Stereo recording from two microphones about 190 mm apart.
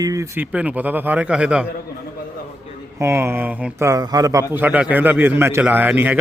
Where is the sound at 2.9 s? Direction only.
15° right (ahead or behind).